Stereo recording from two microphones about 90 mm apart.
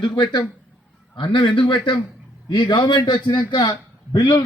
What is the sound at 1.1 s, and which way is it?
A man's voice, 60° left (ahead or behind).